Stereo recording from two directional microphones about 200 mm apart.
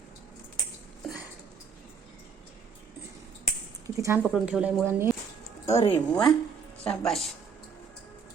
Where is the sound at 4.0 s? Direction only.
15° right (ahead or behind).